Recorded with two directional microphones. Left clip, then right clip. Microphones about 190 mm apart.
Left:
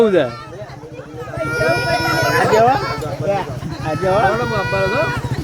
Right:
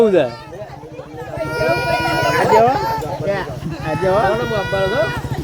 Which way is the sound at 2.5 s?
15° right (ahead or behind).